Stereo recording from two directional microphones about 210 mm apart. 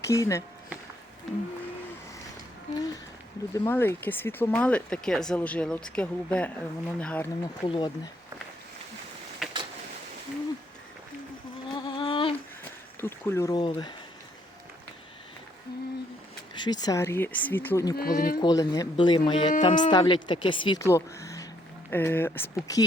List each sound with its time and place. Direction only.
0.0 s speech: 15° left (ahead or behind)
1.3 s a sound: centre (ahead or behind)
2.7 s a sound: 15° left (ahead or behind)
3.5 s speech: 15° left (ahead or behind)
7.7 s speech: 20° left (ahead or behind)
9.4 s vehicle: centre (ahead or behind)
11.7 s a sound: 25° left (ahead or behind)
13.0 s speech: 10° left (ahead or behind)
16.6 s speech: 20° left (ahead or behind)
17.9 s speech: 45° left (ahead or behind)
18.3 s speech: 20° left (ahead or behind)
19.5 s speech: 35° left (ahead or behind)
19.9 s speech: 20° left (ahead or behind)